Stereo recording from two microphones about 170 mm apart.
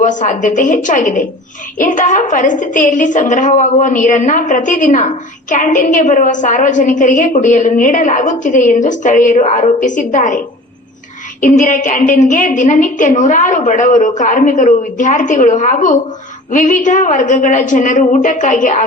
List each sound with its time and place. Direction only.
0.0 s a woman's voice: 50° left (ahead or behind)